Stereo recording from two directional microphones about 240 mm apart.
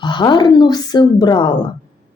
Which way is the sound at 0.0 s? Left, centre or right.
Centre.